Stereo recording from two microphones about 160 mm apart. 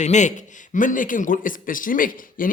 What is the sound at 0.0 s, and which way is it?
A man's voice, 50° left (ahead or behind).